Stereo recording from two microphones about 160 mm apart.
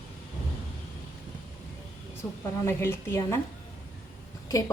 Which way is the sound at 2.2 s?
15° left (ahead or behind).